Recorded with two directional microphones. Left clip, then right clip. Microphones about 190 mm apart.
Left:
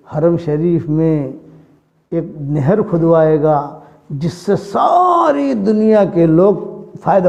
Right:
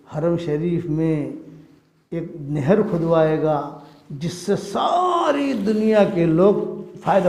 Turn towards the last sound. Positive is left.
turn(degrees=40)  # may be behind; listen again after turning